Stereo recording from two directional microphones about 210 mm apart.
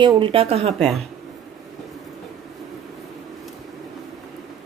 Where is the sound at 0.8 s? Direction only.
Centre (ahead or behind).